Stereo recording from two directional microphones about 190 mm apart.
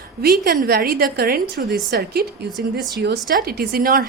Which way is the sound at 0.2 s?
50° right (ahead or behind).